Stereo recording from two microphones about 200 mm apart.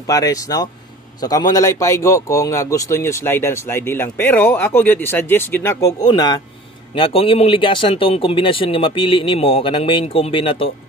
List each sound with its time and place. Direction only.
0.0 s a man's voice: 15° left (ahead or behind)